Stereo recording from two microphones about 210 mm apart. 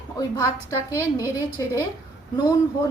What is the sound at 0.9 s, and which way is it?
Speech, 15° left (ahead or behind).